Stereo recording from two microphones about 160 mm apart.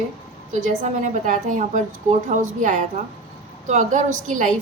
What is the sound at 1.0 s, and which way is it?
A woman's voice, 50° right (ahead or behind).